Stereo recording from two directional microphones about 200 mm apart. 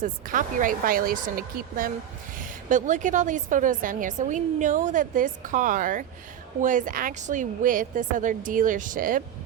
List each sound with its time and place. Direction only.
0.0 s a woman's voice: 40° right (ahead or behind)